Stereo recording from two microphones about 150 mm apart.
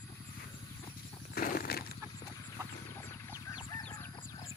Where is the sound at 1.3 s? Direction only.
75° left (ahead or behind); by 2.0 s 90° left.